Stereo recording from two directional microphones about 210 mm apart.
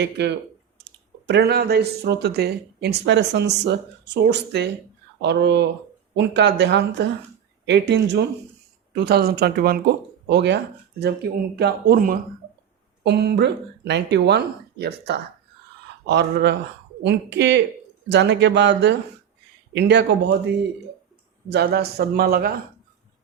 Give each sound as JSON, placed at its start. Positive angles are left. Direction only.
{"t": 0.0, "sound": "speech", "side_deg": -55}
{"t": 21.5, "sound": "speech", "side_deg": -50}